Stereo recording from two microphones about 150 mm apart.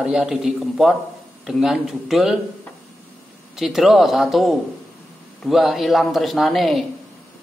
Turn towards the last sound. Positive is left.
turn(degrees=0)  # may be behind; listen again after turning